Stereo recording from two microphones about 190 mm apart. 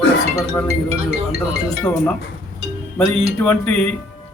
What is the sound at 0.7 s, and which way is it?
Speech, 35° right (ahead or behind).